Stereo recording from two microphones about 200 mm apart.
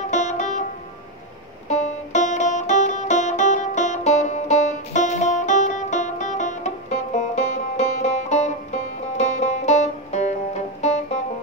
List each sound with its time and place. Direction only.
0.0 s music: 35° left (ahead or behind)
1.7 s music: 35° left (ahead or behind)